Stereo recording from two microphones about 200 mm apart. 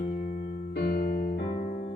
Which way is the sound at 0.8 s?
55° left (ahead or behind).